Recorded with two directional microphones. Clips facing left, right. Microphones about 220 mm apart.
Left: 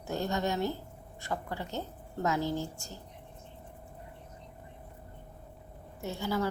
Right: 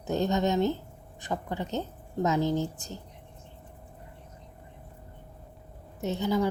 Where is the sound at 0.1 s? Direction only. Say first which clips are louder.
Right 6 dB; 20° right (ahead or behind).